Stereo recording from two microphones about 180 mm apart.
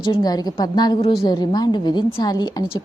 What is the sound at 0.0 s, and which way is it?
A woman's voice, 25° left (ahead or behind).